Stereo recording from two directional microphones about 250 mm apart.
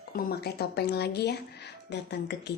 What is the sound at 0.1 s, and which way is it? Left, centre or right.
Speech, left.